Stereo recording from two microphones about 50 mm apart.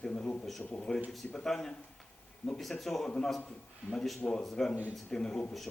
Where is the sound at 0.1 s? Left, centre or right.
Left.